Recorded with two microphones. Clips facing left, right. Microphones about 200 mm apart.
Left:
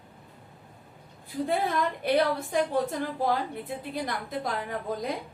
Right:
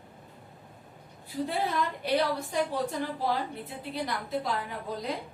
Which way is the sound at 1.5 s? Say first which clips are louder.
Left 4 dB; 50° left (ahead or behind).